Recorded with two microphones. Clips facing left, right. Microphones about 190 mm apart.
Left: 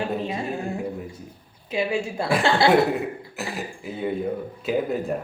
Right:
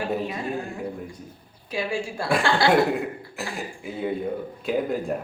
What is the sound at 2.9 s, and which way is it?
A man's voice, centre (ahead or behind).